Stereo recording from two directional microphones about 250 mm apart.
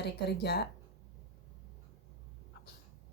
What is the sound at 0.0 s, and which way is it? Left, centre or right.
Speech, left.